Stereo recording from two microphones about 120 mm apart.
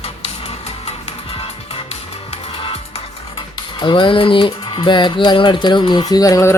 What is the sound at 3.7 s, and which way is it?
Speech, 45° left (ahead or behind).